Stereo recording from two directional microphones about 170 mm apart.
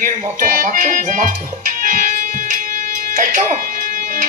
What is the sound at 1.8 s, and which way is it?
Music, 50° right (ahead or behind).